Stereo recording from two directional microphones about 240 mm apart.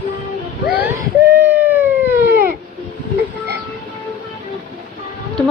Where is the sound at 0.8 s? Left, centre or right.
Centre.